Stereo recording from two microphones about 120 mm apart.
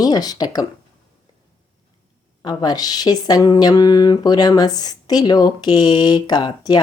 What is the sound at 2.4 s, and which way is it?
Speech, 35° left (ahead or behind).